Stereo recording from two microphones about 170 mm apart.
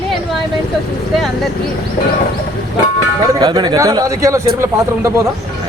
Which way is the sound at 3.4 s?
25° right (ahead or behind).